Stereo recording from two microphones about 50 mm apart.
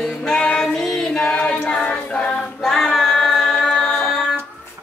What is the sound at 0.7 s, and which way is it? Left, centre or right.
Music, centre.